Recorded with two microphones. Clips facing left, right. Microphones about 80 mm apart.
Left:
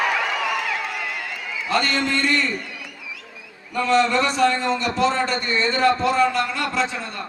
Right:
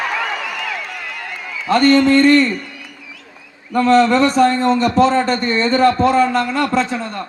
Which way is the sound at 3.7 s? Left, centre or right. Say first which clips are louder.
Right 7 dB; right.